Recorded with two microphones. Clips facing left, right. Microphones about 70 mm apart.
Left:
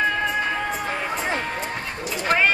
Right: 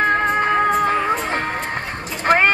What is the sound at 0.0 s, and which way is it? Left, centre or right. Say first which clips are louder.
Music: right 5 dB; right.